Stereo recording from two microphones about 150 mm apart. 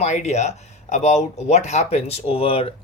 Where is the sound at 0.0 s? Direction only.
50° left (ahead or behind).